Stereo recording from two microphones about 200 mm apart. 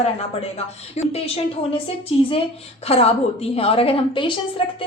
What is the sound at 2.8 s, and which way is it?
A woman's voice, 30° left (ahead or behind).